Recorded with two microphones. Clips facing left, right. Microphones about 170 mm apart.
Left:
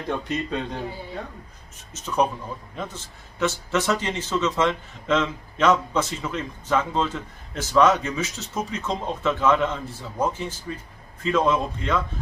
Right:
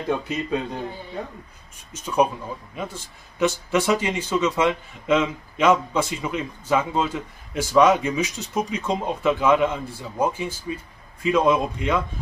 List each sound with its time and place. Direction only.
0.1 s speech: 5° right (ahead or behind)
2.0 s speech: 10° right (ahead or behind)